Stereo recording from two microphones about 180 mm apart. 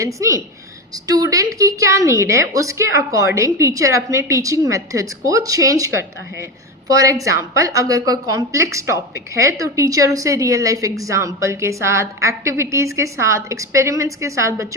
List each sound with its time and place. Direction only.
0.0 s a woman's voice: 15° right (ahead or behind)